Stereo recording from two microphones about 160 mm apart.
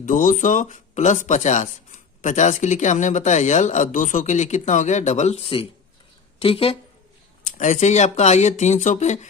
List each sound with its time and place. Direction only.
0.0 s a woman's voice: 55° left (ahead or behind); by 6.7 s 35° left (ahead or behind)
7.4 s speech: 50° left (ahead or behind)